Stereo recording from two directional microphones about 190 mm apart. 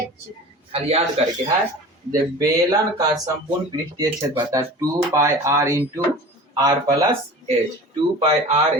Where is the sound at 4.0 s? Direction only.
15° right (ahead or behind).